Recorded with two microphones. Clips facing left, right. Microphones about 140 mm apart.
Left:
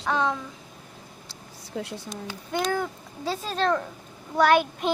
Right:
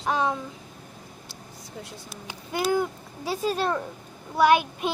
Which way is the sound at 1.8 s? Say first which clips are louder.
Left 8 dB; 80° left.